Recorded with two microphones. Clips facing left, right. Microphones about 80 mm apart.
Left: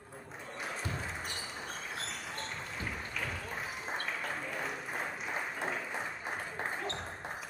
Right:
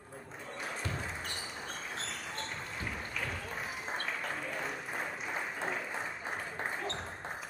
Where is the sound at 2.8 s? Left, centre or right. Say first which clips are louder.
Even; centre.